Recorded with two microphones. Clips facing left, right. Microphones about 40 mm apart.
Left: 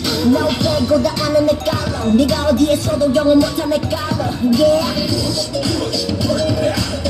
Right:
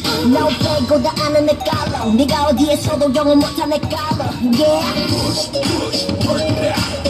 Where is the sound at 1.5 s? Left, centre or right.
Right.